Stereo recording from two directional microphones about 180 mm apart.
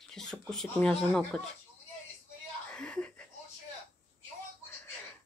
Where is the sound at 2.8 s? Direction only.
5° left (ahead or behind).